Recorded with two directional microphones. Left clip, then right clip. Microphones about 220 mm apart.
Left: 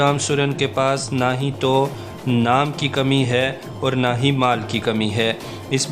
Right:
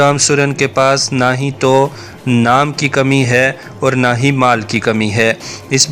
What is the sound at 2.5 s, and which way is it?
Speech, 15° right (ahead or behind).